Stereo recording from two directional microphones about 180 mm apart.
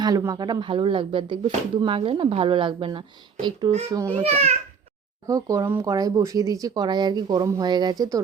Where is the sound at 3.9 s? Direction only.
20° right (ahead or behind).